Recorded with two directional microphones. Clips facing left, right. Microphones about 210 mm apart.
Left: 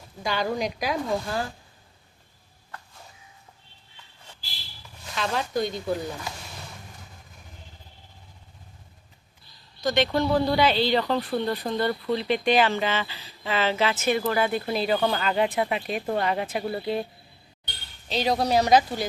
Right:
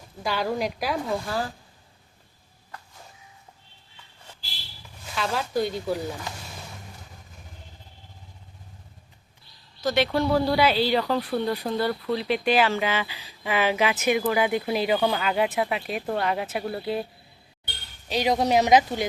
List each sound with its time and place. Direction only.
0.2 s a woman's voice: 5° right (ahead or behind)
5.0 s a woman's voice: 5° right (ahead or behind)
9.8 s speech: 5° right (ahead or behind)
18.1 s speech: 15° right (ahead or behind)